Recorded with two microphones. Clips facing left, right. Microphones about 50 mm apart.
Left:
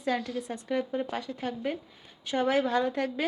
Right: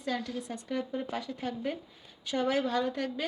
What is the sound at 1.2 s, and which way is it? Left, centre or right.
A woman's voice, centre.